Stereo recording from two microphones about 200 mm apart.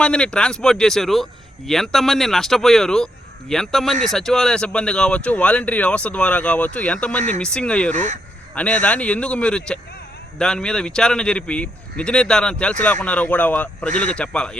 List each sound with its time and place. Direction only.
0.0 s speech: 5° left (ahead or behind)
7.9 s speech: 35° right (ahead or behind)
8.5 s speech: 5° left (ahead or behind)